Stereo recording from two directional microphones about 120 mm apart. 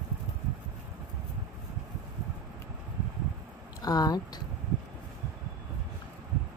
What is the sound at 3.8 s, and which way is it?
Speech, 30° left (ahead or behind).